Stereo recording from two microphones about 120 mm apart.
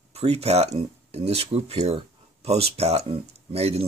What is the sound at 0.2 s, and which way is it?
Speech, 60° right (ahead or behind).